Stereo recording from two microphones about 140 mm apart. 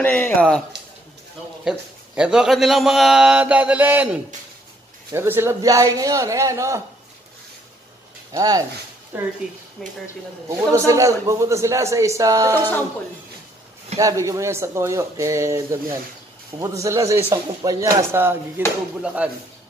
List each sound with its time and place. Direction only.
0.0 s speech: 10° left (ahead or behind)
1.6 s a man's voice: 5° right (ahead or behind); by 6.8 s 20° right (ahead or behind)
8.3 s speech: 25° right (ahead or behind)
9.1 s a man's voice: 15° right (ahead or behind)
10.7 s speech: 20° right (ahead or behind)
12.5 s speech: 15° left (ahead or behind)
13.9 s a man's voice: 25° right (ahead or behind)